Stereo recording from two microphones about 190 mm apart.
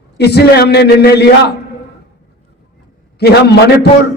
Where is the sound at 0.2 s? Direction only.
60° left (ahead or behind).